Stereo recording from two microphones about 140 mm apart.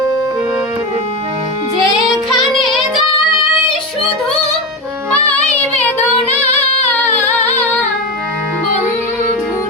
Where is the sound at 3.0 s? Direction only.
40° left (ahead or behind).